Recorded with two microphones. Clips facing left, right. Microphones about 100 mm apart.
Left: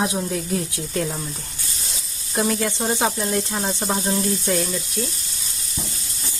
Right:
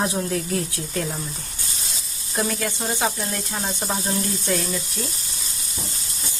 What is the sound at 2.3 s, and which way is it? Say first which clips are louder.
Speech: left 3 dB; 20° left (ahead or behind).